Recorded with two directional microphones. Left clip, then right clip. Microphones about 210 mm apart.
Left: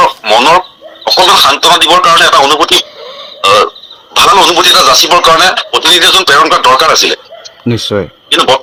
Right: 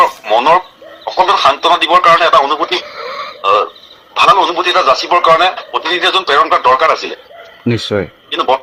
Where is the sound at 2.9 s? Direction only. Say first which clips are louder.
Right 3 dB; 30° right (ahead or behind).